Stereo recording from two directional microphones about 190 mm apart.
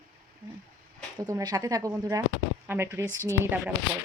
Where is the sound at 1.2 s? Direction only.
20° right (ahead or behind).